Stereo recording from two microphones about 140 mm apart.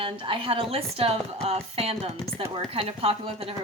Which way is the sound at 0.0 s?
40° right (ahead or behind).